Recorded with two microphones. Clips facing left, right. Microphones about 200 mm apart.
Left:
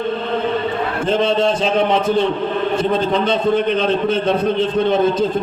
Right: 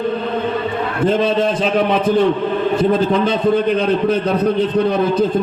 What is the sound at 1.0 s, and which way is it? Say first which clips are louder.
A man's voice: right 1 dB; 25° left (ahead or behind).